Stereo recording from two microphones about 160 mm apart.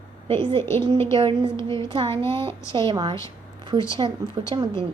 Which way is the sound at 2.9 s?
30° right (ahead or behind).